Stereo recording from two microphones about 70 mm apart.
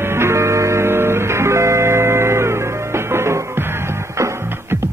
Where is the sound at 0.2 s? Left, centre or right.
Right.